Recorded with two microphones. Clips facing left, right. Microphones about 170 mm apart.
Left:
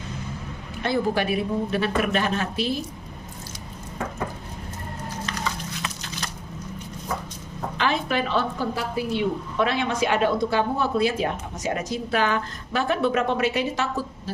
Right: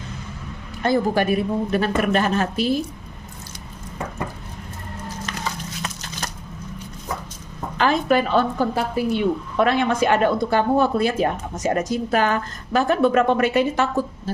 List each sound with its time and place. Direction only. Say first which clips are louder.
0.8 s speech: right 4 dB; 45° right (ahead or behind)
5.8 s a sound: right 2 dB; 45° right (ahead or behind)
7.8 s speech: right 6 dB; 45° right (ahead or behind)